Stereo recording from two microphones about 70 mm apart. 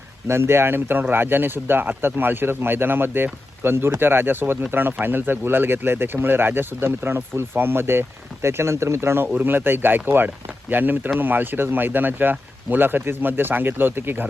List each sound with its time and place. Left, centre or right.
0.3 s speech: right